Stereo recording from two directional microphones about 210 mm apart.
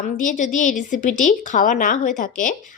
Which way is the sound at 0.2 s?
35° left (ahead or behind).